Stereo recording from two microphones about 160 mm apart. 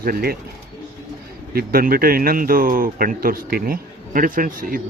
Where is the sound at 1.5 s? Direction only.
65° right (ahead or behind).